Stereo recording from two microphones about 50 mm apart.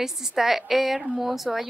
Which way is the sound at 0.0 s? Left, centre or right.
Centre.